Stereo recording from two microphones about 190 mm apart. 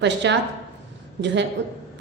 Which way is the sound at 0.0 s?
65° right (ahead or behind).